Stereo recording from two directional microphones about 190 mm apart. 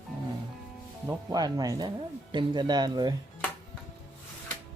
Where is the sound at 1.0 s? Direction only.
20° right (ahead or behind).